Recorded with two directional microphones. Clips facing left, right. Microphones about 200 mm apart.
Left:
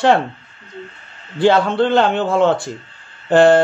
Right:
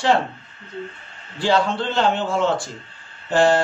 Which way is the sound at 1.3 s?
60° left (ahead or behind).